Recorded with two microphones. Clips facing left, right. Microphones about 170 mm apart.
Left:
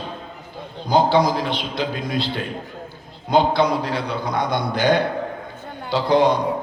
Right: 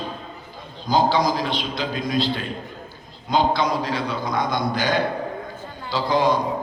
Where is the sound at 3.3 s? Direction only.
60° left (ahead or behind).